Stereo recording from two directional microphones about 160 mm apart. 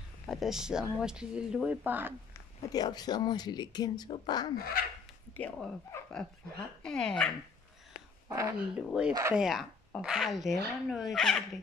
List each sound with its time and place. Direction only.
0.3 s speech: centre (ahead or behind)
2.7 s speech: 25° left (ahead or behind)
4.6 s dog: 65° left (ahead or behind)
5.3 s speech: 10° left (ahead or behind)
8.3 s speech: 20° right (ahead or behind)
9.0 s speech: 5° right (ahead or behind)